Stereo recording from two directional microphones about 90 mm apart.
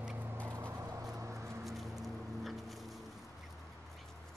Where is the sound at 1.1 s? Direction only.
35° right (ahead or behind).